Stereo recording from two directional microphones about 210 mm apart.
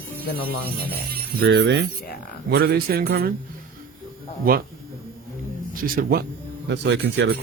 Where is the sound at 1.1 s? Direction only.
50° right (ahead or behind).